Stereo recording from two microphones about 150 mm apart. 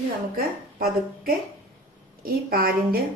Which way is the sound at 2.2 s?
75° right (ahead or behind).